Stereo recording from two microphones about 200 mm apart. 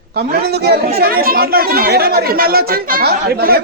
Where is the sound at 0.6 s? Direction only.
50° right (ahead or behind).